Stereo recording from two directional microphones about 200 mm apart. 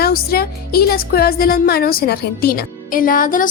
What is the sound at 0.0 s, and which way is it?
Speech, 50° left (ahead or behind).